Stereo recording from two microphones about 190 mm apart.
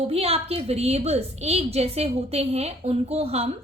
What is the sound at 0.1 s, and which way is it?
A woman's voice, 30° right (ahead or behind).